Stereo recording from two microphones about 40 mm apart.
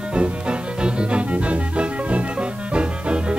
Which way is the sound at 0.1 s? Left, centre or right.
Right.